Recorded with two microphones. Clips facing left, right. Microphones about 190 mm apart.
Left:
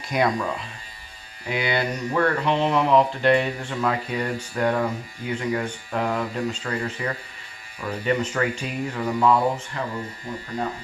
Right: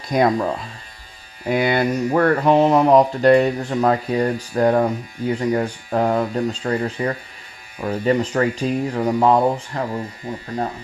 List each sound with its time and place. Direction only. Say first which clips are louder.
0.1 s mantra: right 5 dB; 35° right (ahead or behind)
1.5 s mantra: right 7 dB; 45° right (ahead or behind)